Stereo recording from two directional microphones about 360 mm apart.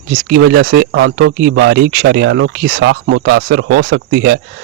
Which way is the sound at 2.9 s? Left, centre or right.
Right.